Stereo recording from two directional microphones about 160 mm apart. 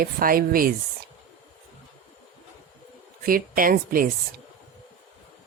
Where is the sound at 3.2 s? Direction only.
65° right (ahead or behind).